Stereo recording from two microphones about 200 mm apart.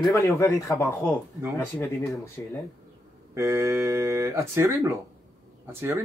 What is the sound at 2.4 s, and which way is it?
Speech, 10° left (ahead or behind).